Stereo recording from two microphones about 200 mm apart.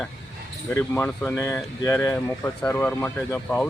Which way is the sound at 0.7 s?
10° left (ahead or behind).